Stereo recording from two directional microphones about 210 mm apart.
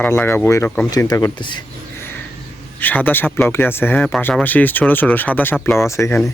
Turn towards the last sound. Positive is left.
turn(degrees=10)  # may be behind; listen again after turning